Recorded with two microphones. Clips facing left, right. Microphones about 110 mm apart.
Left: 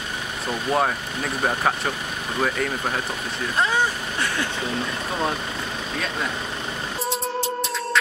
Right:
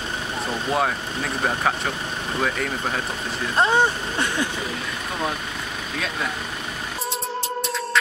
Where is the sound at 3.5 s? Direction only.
25° right (ahead or behind).